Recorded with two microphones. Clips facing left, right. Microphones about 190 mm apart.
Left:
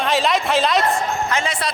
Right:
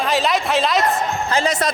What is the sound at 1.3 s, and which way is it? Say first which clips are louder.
Speech: right 4 dB; 35° right (ahead or behind).